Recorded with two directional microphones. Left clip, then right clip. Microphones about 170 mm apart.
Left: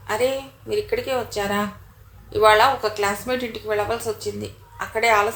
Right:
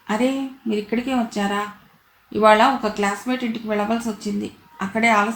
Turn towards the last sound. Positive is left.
turn(degrees=35)  # may be behind; listen again after turning